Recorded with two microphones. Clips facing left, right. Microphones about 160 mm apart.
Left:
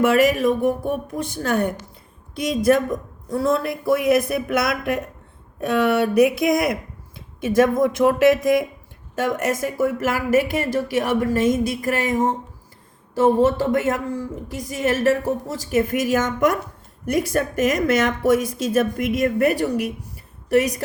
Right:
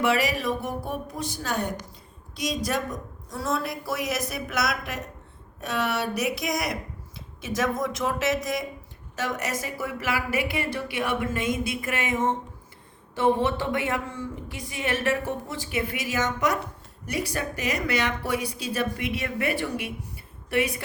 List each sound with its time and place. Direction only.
0.0 s a woman's voice: 50° left (ahead or behind)